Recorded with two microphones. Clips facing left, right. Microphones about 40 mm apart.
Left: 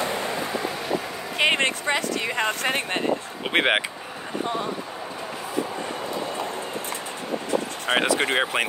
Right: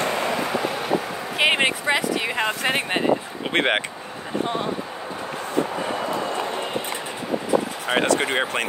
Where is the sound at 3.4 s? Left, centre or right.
Centre.